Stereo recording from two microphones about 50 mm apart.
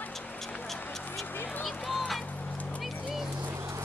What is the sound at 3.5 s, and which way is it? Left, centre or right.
Music, right.